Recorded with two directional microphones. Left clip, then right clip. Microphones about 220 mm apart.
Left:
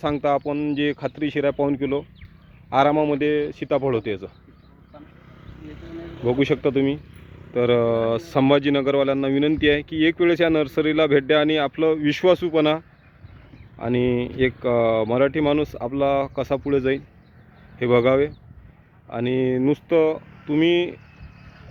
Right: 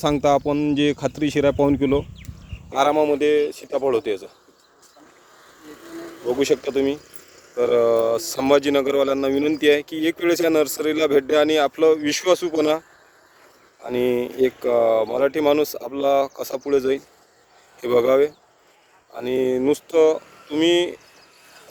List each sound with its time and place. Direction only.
0.0 s speech: centre (ahead or behind)
5.9 s a sound: 40° left (ahead or behind)
6.3 s speech: 5° right (ahead or behind)
13.9 s speech: 5° right (ahead or behind)